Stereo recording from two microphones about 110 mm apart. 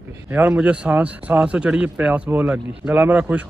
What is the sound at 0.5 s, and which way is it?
A man's voice, 10° right (ahead or behind).